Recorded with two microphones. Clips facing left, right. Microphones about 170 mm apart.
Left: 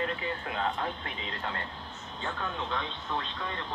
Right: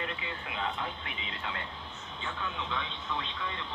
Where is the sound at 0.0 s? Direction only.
45° left (ahead or behind).